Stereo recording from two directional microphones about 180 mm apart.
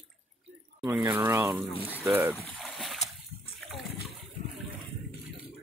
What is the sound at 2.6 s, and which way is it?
Splash, centre (ahead or behind).